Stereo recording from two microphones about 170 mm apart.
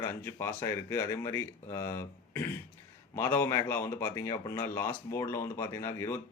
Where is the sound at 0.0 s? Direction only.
15° left (ahead or behind).